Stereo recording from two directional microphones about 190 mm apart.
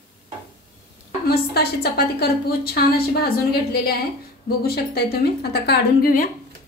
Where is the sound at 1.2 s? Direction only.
55° left (ahead or behind).